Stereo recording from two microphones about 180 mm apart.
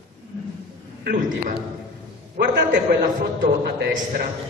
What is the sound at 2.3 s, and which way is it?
Speech, 70° right (ahead or behind).